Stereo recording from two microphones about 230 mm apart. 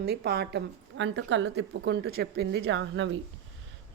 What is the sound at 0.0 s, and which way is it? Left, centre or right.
A woman's voice, right.